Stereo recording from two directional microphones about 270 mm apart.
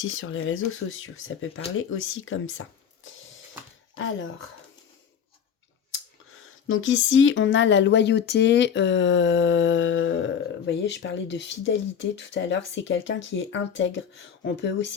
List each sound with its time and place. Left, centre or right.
0.0 s speech: left
6.7 s speech: left